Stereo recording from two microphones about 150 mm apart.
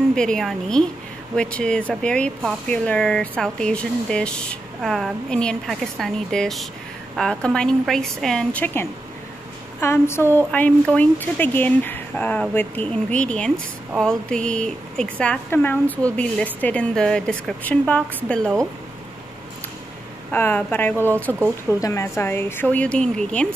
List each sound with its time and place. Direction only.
0.1 s speech: 5° left (ahead or behind)
20.2 s speech: 10° left (ahead or behind)
20.9 s speech: 15° right (ahead or behind)
21.7 s speech: 20° left (ahead or behind); by 23.5 s 5° left (ahead or behind)